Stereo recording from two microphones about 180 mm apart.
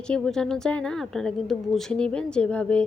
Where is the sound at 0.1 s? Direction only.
5° left (ahead or behind).